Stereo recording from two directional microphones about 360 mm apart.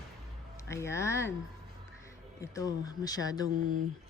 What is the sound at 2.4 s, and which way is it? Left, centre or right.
Speech, centre.